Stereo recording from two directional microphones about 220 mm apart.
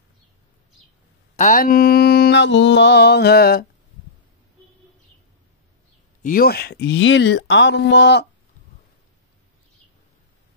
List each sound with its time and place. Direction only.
1.3 s mantra: 35° left (ahead or behind)
6.2 s speech: 40° left (ahead or behind)